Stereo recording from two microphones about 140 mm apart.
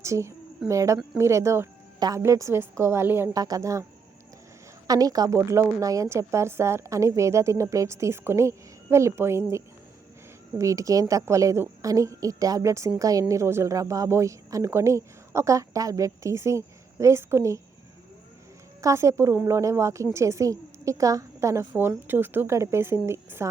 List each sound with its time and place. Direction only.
0.0 s a woman's voice: 20° right (ahead or behind)
4.9 s a woman's voice: 25° right (ahead or behind)
18.8 s a woman's voice: 20° right (ahead or behind)